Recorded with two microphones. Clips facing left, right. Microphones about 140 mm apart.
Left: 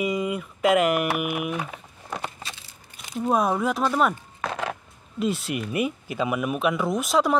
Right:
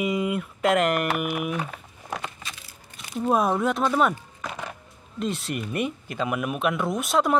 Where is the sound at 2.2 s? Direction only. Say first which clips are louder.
Left 2 dB; 30° left (ahead or behind).